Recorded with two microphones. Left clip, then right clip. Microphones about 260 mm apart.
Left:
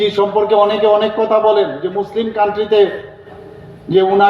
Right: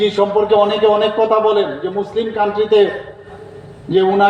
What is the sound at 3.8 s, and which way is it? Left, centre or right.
Speech, left.